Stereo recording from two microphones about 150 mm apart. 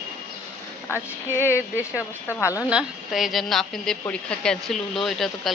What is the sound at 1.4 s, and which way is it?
Speech, 20° left (ahead or behind).